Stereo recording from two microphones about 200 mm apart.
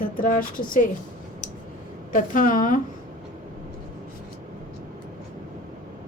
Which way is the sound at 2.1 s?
40° left (ahead or behind).